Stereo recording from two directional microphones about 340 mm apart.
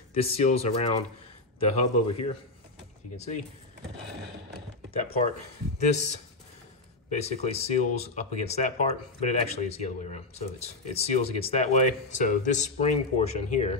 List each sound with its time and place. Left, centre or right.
0.1 s speech: centre
5.8 s speech: centre